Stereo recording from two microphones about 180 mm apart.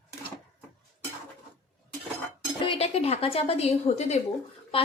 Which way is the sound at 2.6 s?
30° left (ahead or behind).